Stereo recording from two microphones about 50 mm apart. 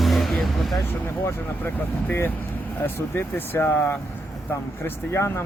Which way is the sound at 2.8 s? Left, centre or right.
Left.